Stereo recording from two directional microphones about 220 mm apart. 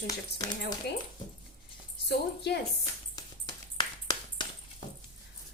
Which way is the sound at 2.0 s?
50° left (ahead or behind).